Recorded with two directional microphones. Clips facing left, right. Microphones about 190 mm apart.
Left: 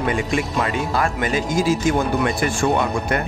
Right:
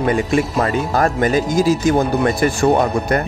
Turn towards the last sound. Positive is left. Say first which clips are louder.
# right 5 dB
turn(degrees=-40)  # may be behind; listen again after turning